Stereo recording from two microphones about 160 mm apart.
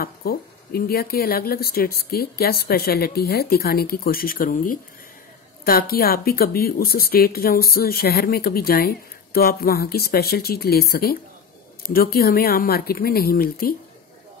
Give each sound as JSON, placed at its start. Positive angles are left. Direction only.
{"t": 0.0, "sound": "speech", "side_deg": 70}